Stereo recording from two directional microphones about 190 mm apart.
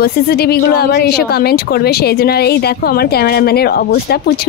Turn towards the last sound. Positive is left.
turn(degrees=55)  # may be behind; listen again after turning